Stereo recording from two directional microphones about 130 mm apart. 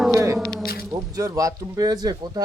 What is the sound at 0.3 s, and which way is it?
Squish, 5° left (ahead or behind).